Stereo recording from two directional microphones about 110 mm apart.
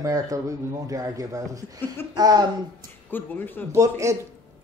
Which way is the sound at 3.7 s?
30° right (ahead or behind).